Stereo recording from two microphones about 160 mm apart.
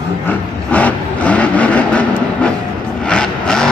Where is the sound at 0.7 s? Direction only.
10° left (ahead or behind).